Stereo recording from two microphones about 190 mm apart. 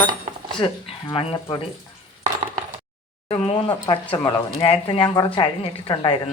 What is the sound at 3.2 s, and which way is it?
Speech, 30° left (ahead or behind).